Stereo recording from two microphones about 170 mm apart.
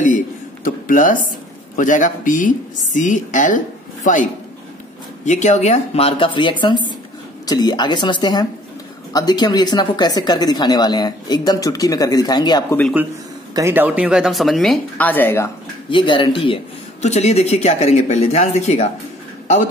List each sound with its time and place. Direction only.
0.7 s speech: 50° left (ahead or behind); by 12.7 s 25° left (ahead or behind)
13.6 s speech: 15° right (ahead or behind); by 15.5 s 15° left (ahead or behind)
15.9 s speech: 30° left (ahead or behind)
17.0 s speech: 40° left (ahead or behind)